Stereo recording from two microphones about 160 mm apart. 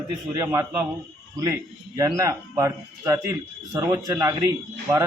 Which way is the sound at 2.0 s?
20° right (ahead or behind).